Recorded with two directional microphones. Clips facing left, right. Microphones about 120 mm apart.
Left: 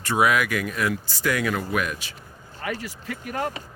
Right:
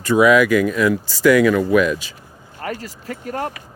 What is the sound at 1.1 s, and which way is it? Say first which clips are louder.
Speech: right 12 dB; 90° right.